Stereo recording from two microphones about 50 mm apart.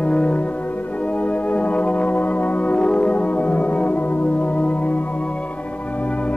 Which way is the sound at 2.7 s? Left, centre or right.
Left.